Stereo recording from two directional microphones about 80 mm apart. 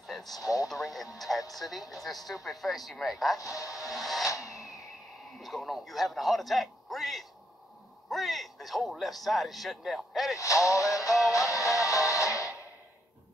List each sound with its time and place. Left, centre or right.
0.0 s radio: centre
0.4 s music: left
0.7 s speech: centre
3.3 s speech: left
3.9 s speech: centre
4.3 s a sound: left
5.4 s a man's voice: centre
10.4 s music: left